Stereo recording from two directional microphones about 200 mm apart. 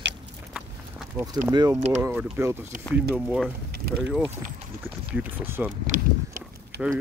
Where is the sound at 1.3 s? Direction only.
20° right (ahead or behind).